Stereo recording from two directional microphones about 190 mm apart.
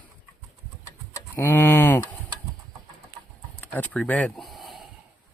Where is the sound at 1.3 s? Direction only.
10° left (ahead or behind).